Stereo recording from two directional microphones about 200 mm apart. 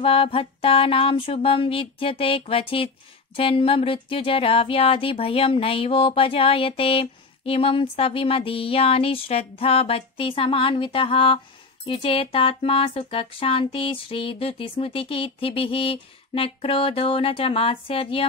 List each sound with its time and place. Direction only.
0.0 s speech: 25° left (ahead or behind)